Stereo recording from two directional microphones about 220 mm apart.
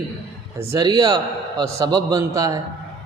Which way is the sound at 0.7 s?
20° right (ahead or behind).